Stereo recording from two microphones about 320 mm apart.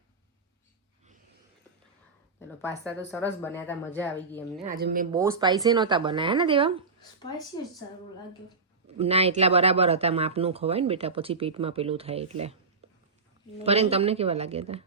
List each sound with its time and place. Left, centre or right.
2.6 s speech: centre
4.6 s speech: right
5.1 s speech: centre
9.0 s speech: centre
12.8 s a sound: centre
13.7 s speech: centre